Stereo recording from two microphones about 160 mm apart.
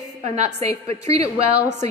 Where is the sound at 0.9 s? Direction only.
40° right (ahead or behind).